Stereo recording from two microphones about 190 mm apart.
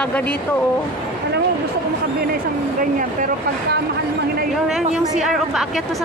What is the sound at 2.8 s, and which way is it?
Speech, 45° right (ahead or behind).